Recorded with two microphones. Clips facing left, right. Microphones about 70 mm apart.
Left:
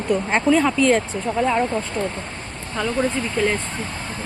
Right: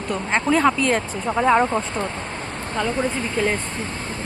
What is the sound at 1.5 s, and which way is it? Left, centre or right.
Speech, right.